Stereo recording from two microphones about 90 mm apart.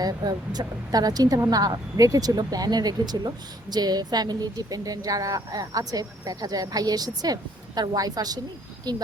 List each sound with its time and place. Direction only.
0.0 s speech: 45° right (ahead or behind)